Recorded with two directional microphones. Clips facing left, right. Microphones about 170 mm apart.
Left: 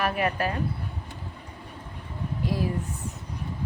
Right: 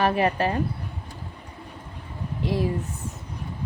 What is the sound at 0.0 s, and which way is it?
Speech, 30° right (ahead or behind).